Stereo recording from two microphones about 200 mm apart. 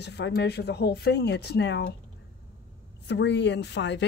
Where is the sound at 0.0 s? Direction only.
55° left (ahead or behind).